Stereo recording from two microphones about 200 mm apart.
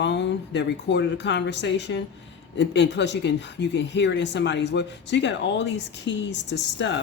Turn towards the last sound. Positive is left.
turn(degrees=60)  # may be behind; listen again after turning